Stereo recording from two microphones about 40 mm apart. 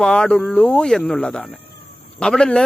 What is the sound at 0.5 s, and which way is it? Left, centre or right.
Speech, left.